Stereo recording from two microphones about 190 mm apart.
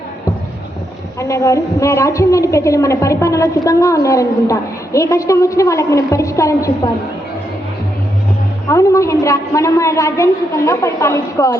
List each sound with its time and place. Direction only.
1.2 s a woman's voice: 15° left (ahead or behind)
8.7 s a woman's voice: 15° left (ahead or behind)